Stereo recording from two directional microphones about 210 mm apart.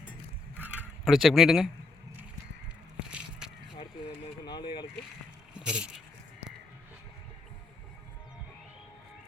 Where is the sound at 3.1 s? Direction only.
5° right (ahead or behind).